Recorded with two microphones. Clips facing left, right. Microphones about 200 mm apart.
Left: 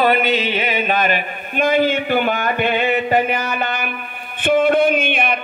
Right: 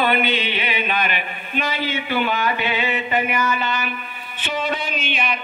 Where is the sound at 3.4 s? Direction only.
55° left (ahead or behind).